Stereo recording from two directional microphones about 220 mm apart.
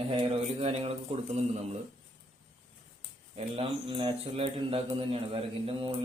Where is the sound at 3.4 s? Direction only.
25° right (ahead or behind).